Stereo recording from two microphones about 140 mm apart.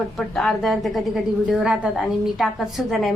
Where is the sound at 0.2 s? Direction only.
Centre (ahead or behind).